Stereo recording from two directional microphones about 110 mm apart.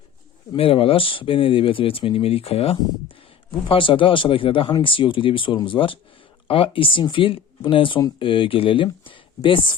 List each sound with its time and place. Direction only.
0.5 s speech: 55° left (ahead or behind)